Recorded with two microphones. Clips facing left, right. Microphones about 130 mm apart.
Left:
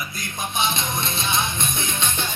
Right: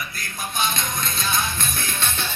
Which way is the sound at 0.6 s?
25° left (ahead or behind).